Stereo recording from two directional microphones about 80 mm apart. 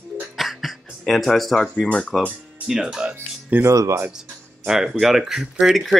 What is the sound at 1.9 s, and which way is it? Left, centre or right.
Speech, centre.